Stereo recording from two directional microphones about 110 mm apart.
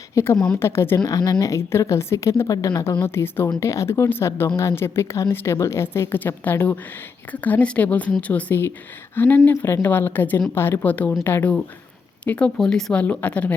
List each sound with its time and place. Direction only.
0.1 s a woman's voice: 25° left (ahead or behind)
12.2 s a woman's voice: 15° left (ahead or behind)